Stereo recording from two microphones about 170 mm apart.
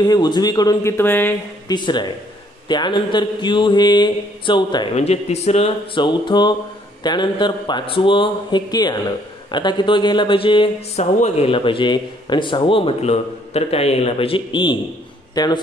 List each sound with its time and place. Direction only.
0.0 s mantra: 25° left (ahead or behind)
1.7 s mantra: 25° left (ahead or behind)
4.9 s speech: 40° left (ahead or behind)
7.0 s mantra: 25° left (ahead or behind)
11.1 s a man's voice: 40° left (ahead or behind); by 15.6 s 25° left (ahead or behind)